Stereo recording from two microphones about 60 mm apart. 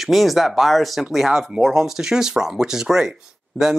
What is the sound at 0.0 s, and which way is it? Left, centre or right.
Speech, centre.